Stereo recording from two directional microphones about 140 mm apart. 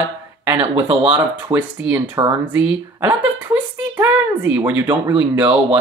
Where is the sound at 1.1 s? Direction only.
10° right (ahead or behind).